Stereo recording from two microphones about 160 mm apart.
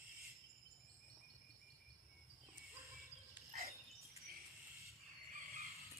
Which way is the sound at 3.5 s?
40° right (ahead or behind).